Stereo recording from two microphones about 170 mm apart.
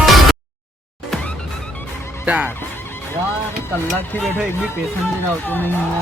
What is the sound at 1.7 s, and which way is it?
Music, 15° left (ahead or behind).